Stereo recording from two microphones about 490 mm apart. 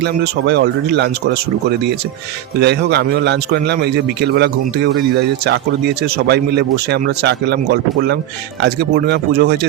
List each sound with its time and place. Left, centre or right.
0.0 s speech: centre
2.6 s speech: centre
6.0 s speech: centre